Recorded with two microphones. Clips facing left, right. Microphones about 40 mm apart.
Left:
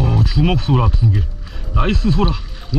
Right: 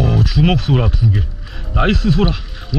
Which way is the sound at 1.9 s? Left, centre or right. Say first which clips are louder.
Right 2 dB; right.